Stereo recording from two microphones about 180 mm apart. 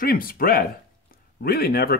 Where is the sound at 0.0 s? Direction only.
55° left (ahead or behind).